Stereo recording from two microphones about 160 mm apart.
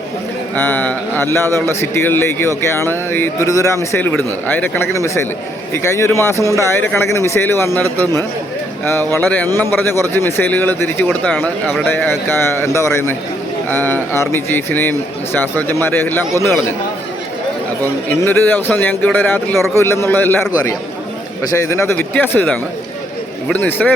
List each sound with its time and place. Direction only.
0.5 s a man's voice: 10° left (ahead or behind)
18.1 s a man's voice: 15° left (ahead or behind)
21.5 s a man's voice: 15° left (ahead or behind)